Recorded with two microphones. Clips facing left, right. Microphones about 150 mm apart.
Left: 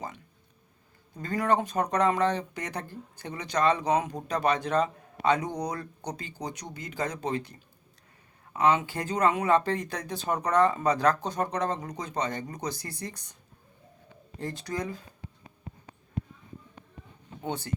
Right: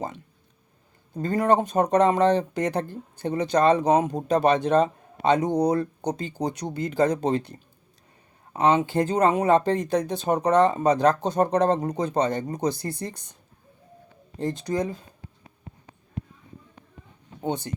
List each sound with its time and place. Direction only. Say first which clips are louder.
1.1 s speech: right 5 dB; 30° right (ahead or behind)
1.8 s speech: right 6 dB; 25° right (ahead or behind)
3.6 s speech: right 5 dB; 50° right (ahead or behind)
4.1 s a man's voice: right 7 dB; 25° right (ahead or behind)
8.5 s speech: right 4 dB; 25° right (ahead or behind)
9.3 s speech: right 5 dB; 40° right (ahead or behind)
10.1 s speech: right 3 dB; 20° right (ahead or behind)
14.3 s speech: right 7 dB; 20° right (ahead or behind)
17.4 s speech: right 4 dB; 20° right (ahead or behind)